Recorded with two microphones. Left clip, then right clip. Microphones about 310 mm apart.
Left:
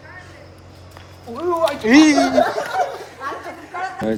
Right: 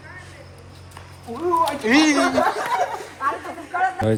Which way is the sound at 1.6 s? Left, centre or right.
Centre.